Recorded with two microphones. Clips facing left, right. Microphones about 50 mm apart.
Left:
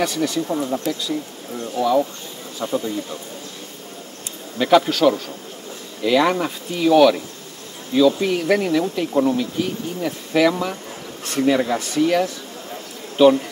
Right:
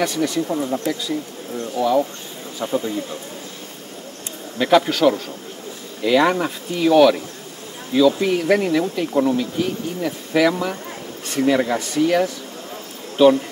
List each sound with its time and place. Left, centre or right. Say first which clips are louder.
0.0 s speech: right 1 dB; centre
0.7 s speech: right 1 dB; right
1.8 s speech: even; centre
4.6 s speech: even; centre